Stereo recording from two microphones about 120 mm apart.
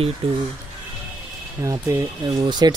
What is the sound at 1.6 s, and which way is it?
Speech, 25° right (ahead or behind).